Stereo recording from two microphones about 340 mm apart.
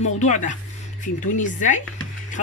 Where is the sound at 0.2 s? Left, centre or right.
Left.